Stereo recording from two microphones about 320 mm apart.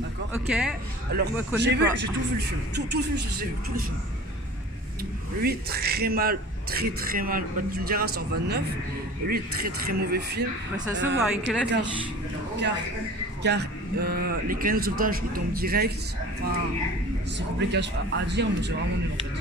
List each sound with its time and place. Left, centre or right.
0.3 s speech: centre
1.1 s a man's voice: right
5.4 s a man's voice: right
13.4 s a man's voice: right
17.4 s speech: right